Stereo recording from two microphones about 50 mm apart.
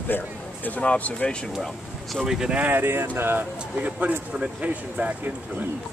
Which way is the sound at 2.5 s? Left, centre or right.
Right.